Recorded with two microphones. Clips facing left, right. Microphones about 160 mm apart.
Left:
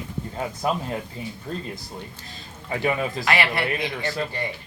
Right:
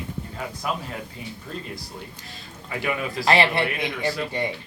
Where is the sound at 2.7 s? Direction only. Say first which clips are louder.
Left 3 dB; 30° left (ahead or behind).